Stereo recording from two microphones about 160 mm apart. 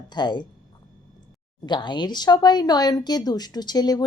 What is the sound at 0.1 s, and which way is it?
Speech, 30° left (ahead or behind).